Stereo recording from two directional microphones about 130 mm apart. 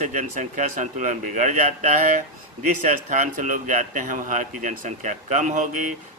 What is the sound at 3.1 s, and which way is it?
Speech, 90° right.